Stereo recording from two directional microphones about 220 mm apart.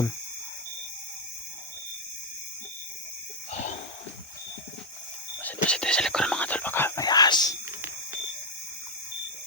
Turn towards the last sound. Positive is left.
turn(degrees=20)  # may be behind; listen again after turning